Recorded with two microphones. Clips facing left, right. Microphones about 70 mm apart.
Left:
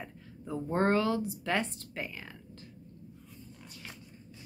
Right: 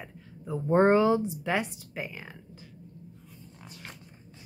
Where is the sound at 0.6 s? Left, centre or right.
Right.